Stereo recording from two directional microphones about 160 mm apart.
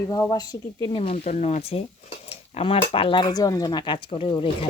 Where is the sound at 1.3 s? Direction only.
50° left (ahead or behind).